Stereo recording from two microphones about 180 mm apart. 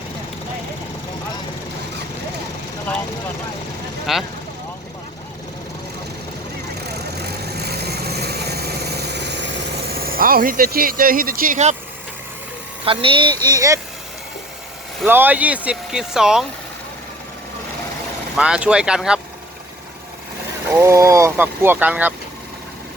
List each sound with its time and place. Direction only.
4.1 s speech: centre (ahead or behind)
6.8 s vehicle: 65° right (ahead or behind); by 11.8 s 40° right (ahead or behind)
12.8 s speech: 30° right (ahead or behind)
15.0 s speech: 10° right (ahead or behind)
18.3 s speech: 5° right (ahead or behind)
20.7 s speech: 15° right (ahead or behind)